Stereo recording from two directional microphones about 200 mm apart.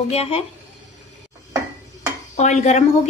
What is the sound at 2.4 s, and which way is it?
Speech, 35° left (ahead or behind).